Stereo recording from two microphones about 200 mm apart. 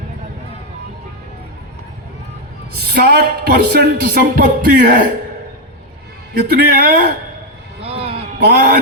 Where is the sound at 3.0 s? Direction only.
45° right (ahead or behind).